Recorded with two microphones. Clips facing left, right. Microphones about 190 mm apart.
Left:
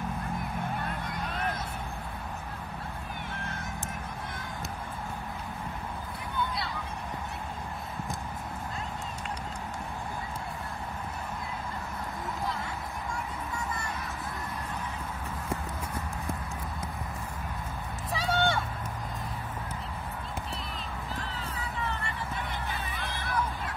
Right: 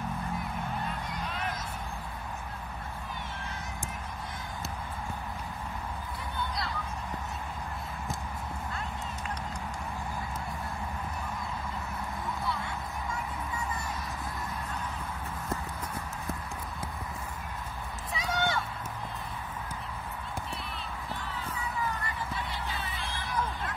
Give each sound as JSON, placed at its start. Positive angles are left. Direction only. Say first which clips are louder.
{"t": 18.1, "sound": "run", "louder": "left 3 dB", "side_deg": 30}